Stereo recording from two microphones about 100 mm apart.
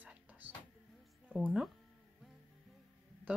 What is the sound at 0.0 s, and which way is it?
Music, 15° right (ahead or behind).